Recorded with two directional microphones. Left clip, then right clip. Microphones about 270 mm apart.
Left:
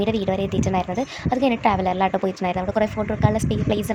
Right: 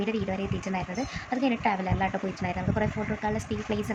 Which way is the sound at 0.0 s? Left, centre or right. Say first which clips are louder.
Left 8 dB; left.